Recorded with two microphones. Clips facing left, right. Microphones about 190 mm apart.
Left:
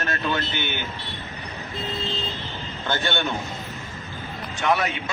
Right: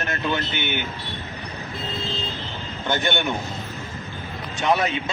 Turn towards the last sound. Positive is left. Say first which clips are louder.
# right 2 dB
turn(degrees=-20)  # may be behind; listen again after turning